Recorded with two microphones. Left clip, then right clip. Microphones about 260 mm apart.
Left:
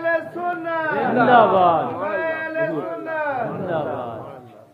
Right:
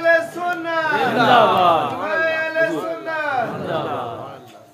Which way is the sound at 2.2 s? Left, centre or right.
Left.